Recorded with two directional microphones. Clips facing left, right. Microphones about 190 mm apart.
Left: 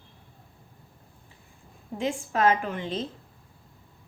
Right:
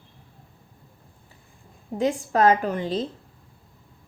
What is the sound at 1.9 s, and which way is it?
A woman's voice, 40° right (ahead or behind).